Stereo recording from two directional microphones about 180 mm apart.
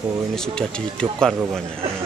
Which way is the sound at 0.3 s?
5° left (ahead or behind).